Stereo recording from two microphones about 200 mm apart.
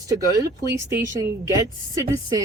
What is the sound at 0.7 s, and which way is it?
Speech, 15° right (ahead or behind).